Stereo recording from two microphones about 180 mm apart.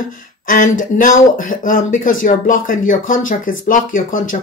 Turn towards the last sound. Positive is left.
turn(degrees=50)  # may be behind; listen again after turning